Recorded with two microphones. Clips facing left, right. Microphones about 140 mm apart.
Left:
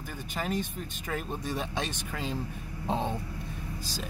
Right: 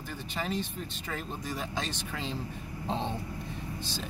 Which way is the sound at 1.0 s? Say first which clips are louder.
Left 5 dB; 10° left (ahead or behind).